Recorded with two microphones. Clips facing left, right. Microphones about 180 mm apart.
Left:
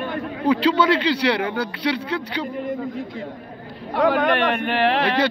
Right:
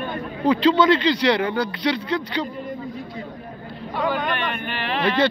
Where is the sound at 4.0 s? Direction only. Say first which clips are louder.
Left 6 dB; 70° left (ahead or behind).